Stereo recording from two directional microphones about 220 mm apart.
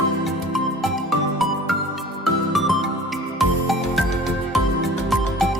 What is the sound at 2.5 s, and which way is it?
Music, centre (ahead or behind).